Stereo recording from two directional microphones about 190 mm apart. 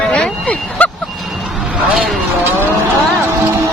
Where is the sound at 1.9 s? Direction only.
Centre (ahead or behind).